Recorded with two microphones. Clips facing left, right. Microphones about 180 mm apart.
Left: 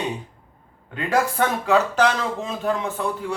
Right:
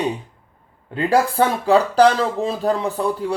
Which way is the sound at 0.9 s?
30° right (ahead or behind).